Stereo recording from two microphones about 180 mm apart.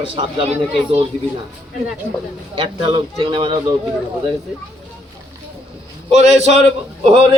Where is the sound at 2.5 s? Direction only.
30° right (ahead or behind).